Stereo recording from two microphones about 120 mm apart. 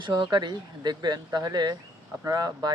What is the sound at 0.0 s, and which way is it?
Speech, 40° right (ahead or behind).